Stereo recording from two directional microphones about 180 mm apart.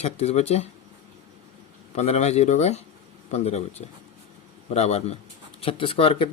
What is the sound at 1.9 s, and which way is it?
Speech, 35° left (ahead or behind).